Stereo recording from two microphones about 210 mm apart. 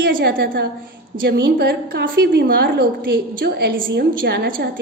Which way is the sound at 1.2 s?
55° right (ahead or behind).